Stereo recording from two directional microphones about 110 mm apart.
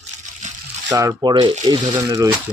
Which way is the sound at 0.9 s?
30° right (ahead or behind).